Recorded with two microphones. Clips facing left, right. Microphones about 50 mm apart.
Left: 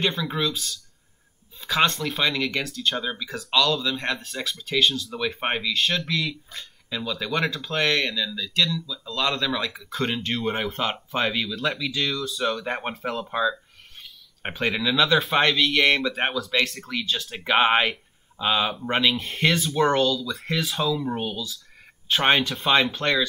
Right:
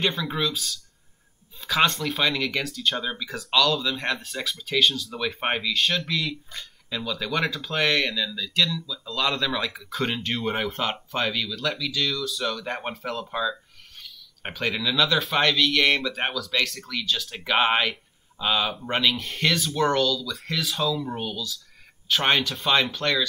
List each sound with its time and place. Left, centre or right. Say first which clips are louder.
0.0 s speech: left 1 dB; centre
11.3 s speech: left 2 dB; centre
17.2 s speech: left 3 dB; centre